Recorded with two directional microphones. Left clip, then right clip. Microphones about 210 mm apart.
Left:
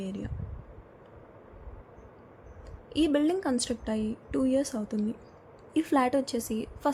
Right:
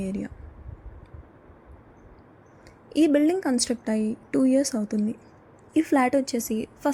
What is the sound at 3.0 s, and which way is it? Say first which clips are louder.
A woman's voice: right 5 dB; 10° right (ahead or behind).